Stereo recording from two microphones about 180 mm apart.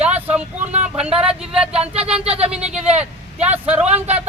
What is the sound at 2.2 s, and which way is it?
Speech, 35° right (ahead or behind).